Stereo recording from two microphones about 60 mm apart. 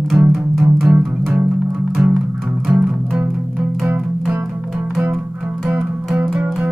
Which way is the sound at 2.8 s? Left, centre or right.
Right.